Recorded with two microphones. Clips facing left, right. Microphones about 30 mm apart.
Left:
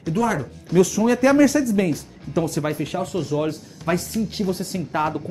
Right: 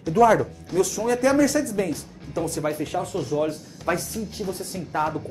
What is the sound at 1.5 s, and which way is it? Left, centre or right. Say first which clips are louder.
Speech: left 4 dB; left.